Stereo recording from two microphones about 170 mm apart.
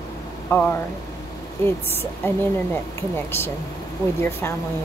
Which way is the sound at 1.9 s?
10° left (ahead or behind).